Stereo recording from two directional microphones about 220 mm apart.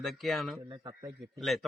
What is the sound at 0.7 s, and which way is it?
Speech, 15° right (ahead or behind).